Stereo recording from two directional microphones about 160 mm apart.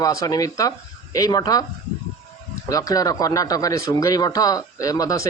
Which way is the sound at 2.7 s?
20° left (ahead or behind).